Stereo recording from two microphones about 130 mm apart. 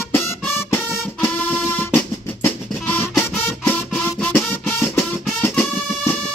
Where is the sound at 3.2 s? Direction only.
15° left (ahead or behind).